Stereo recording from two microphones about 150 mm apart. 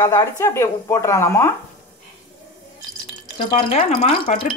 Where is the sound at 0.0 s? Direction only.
20° left (ahead or behind).